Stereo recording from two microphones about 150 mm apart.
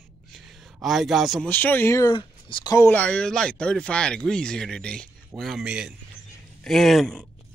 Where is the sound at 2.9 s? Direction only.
5° left (ahead or behind).